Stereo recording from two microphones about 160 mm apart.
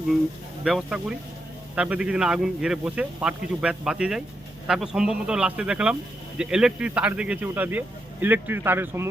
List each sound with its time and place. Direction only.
0.6 s speech: 5° right (ahead or behind)